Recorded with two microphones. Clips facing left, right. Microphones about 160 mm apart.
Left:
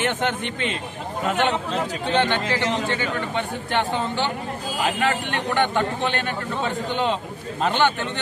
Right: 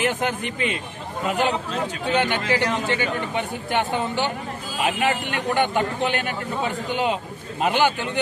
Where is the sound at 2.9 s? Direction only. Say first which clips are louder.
Right 1 dB; 15° right (ahead or behind).